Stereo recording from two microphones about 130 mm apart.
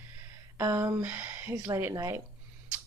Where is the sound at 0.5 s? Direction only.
20° right (ahead or behind).